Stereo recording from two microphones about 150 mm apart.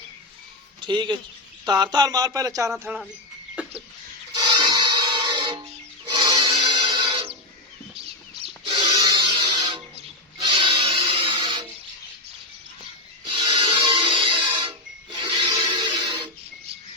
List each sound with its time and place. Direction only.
0.8 s speech: 30° right (ahead or behind)
3.5 s cough: 5° right (ahead or behind)
4.4 s music: 30° right (ahead or behind)
8.6 s music: 35° right (ahead or behind)
13.2 s music: 30° right (ahead or behind)